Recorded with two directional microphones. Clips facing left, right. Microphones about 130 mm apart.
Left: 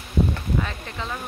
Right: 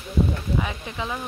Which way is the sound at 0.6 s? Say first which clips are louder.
Right 1 dB; 15° right (ahead or behind).